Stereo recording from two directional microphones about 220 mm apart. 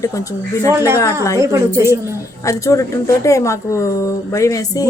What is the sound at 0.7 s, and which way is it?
Music, 10° right (ahead or behind).